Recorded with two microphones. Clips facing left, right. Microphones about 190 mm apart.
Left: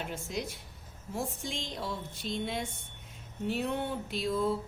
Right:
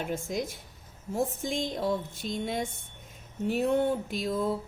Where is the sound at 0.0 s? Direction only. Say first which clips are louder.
Right 5 dB; 50° right (ahead or behind).